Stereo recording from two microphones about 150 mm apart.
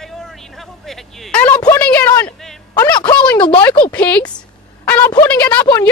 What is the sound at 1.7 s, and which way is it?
Speech, 10° left (ahead or behind).